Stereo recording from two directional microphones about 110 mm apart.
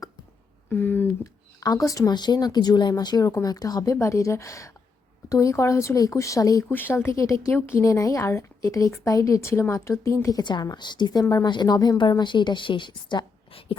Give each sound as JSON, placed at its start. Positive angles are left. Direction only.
{"t": 0.7, "sound": "speech", "side_deg": 20}
{"t": 1.6, "sound": "speech", "side_deg": 30}
{"t": 10.4, "sound": "a woman's voice", "side_deg": 40}